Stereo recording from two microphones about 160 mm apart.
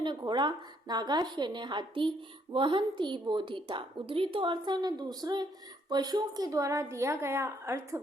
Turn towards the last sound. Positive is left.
turn(degrees=-15)  # may be behind; listen again after turning